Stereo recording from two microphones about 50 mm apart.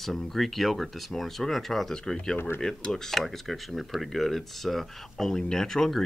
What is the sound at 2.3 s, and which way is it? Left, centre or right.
Speech, left.